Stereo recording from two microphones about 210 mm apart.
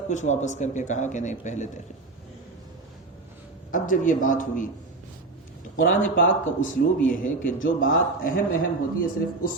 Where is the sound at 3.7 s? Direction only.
40° left (ahead or behind).